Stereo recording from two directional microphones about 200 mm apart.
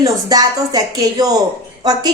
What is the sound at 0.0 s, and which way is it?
A woman's voice, 20° right (ahead or behind).